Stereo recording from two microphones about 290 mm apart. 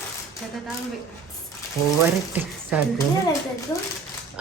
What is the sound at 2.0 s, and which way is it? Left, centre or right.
Speech, centre.